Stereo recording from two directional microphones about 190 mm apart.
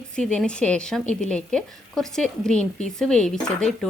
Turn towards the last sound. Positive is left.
turn(degrees=5)  # may be behind; listen again after turning